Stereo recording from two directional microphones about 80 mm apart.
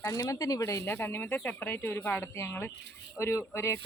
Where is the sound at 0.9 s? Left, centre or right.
Left.